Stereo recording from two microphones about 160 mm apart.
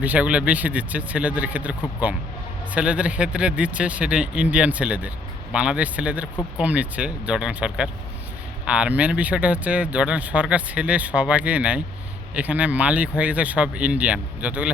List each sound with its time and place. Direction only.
0.0 s speech: 10° right (ahead or behind)
2.7 s speech: 10° right (ahead or behind)